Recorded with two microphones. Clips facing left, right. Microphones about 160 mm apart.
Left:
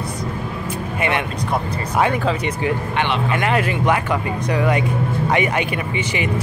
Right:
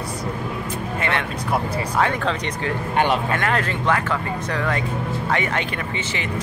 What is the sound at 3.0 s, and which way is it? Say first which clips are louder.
Speech: right 3 dB; 40° right (ahead or behind).